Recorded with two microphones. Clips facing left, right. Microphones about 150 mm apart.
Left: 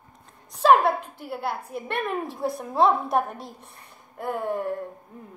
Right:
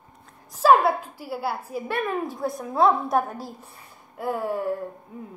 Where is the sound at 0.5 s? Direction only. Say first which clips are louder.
Right 1 dB; 5° right (ahead or behind).